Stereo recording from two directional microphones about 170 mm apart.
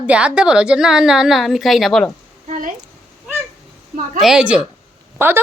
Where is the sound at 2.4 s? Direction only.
50° right (ahead or behind).